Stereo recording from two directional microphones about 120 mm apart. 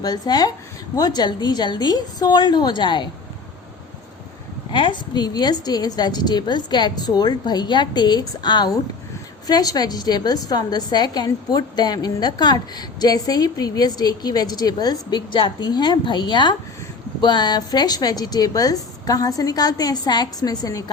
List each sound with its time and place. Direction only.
0.0 s a woman's voice: 35° left (ahead or behind)
4.7 s a woman's voice: 40° left (ahead or behind)